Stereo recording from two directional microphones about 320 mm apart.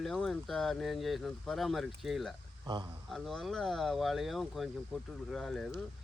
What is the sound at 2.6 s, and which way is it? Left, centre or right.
Speech, centre.